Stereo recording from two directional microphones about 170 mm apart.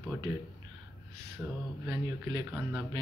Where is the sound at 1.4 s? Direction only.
10° right (ahead or behind).